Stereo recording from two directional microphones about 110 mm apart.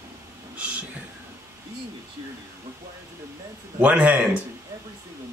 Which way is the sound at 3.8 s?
15° right (ahead or behind).